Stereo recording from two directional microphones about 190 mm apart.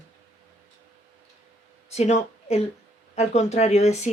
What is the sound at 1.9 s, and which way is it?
Speech, 35° left (ahead or behind).